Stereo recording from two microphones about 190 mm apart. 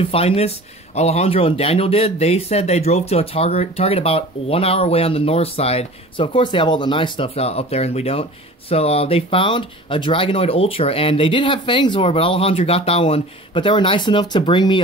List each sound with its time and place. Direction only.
0.0 s speech: 30° left (ahead or behind)